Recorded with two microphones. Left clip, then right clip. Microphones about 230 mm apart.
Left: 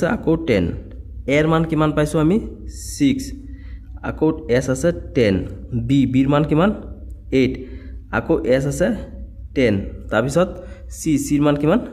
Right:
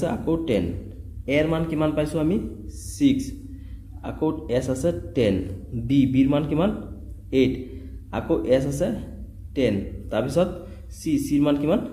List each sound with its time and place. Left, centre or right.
0.0 s a man's voice: left